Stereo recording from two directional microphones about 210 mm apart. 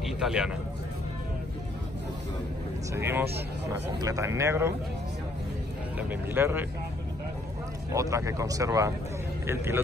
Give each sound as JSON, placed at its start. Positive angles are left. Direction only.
{"t": 0.0, "sound": "a sound", "side_deg": -5}
{"t": 2.9, "sound": "speech", "side_deg": -10}
{"t": 5.9, "sound": "speech", "side_deg": -10}
{"t": 7.9, "sound": "speech", "side_deg": -15}